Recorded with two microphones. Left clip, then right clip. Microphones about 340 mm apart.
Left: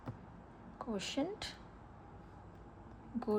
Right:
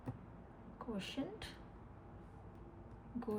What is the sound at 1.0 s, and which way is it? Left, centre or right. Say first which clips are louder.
Speech: left 8 dB; centre.